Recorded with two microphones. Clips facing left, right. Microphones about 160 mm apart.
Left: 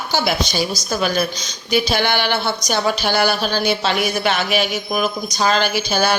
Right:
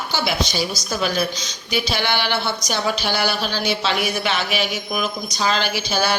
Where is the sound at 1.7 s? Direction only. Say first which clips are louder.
Left 4 dB; 45° left (ahead or behind).